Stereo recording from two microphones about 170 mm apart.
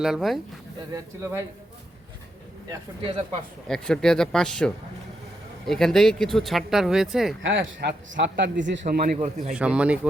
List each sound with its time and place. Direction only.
0.0 s speech: centre (ahead or behind)
0.9 s speech: 15° right (ahead or behind)
3.7 s speech: 5° left (ahead or behind)
7.4 s speech: 90° right
8.9 s speech: 60° right (ahead or behind)
9.2 s a man's voice: 40° right (ahead or behind)
9.6 s speech: 5° right (ahead or behind)